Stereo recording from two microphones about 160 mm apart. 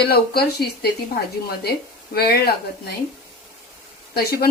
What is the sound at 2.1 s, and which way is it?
Speech, 80° left.